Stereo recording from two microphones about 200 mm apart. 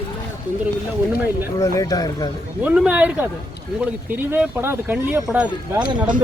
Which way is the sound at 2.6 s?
5° right (ahead or behind).